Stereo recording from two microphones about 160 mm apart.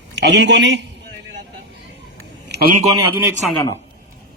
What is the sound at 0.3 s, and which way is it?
Speech, 90° right.